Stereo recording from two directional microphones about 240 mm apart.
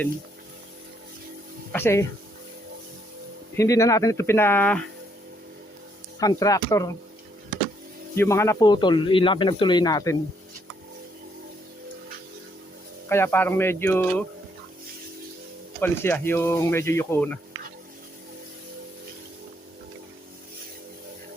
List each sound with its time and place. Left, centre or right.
1.7 s speech: centre
3.5 s speech: centre
6.1 s speech: centre
8.1 s speech: centre
13.1 s speech: centre
15.8 s speech: centre